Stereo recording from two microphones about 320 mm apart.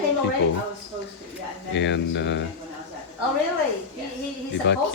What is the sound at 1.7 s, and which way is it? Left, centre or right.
Speech, left.